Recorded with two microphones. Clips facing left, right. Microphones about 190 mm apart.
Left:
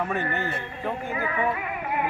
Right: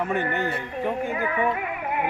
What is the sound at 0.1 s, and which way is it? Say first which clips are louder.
Speech: right 3 dB; 15° right (ahead or behind).